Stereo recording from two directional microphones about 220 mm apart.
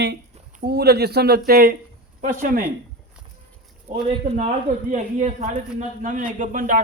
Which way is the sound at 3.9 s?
30° right (ahead or behind).